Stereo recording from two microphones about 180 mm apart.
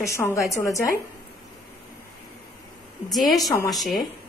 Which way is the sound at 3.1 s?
Centre (ahead or behind).